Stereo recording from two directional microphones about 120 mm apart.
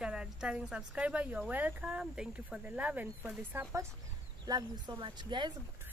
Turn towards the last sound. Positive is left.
turn(degrees=-40)  # may be behind; listen again after turning